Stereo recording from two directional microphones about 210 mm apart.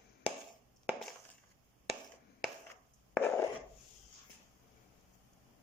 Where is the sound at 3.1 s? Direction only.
10° left (ahead or behind).